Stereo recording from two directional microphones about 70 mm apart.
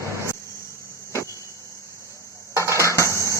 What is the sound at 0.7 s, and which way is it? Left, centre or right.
Cricket, right.